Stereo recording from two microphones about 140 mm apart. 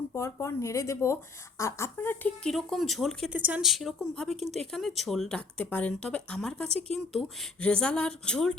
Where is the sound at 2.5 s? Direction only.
Centre (ahead or behind).